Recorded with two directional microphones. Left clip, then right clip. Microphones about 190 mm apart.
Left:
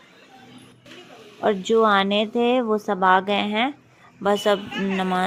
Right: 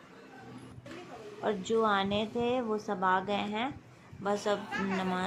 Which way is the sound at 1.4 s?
35° left (ahead or behind).